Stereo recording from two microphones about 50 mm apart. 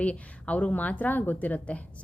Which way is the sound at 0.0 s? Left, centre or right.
Left.